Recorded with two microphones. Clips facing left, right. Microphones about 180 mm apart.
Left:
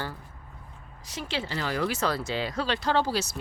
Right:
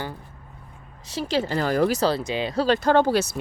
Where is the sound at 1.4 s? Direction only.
45° right (ahead or behind).